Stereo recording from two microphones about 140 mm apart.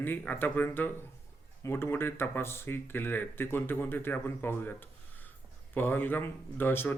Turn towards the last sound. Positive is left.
turn(degrees=15)  # may be behind; listen again after turning